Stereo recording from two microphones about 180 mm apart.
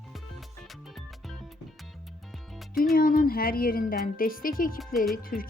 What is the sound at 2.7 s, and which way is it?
Speech, centre (ahead or behind).